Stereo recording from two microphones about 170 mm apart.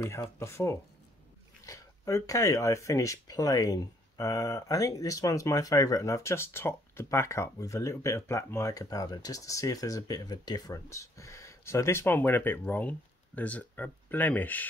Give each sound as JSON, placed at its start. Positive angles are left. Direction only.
{"t": 0.0, "sound": "speech", "side_deg": 15}